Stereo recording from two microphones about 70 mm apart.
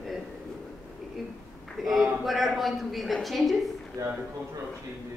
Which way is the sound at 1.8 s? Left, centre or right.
Centre.